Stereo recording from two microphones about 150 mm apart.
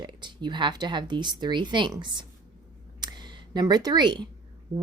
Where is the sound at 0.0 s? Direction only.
30° right (ahead or behind).